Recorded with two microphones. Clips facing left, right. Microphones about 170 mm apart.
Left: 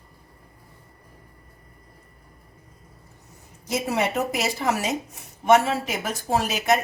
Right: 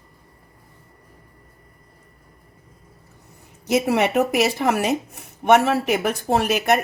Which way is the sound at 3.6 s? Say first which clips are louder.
Right 6 dB; 65° right (ahead or behind).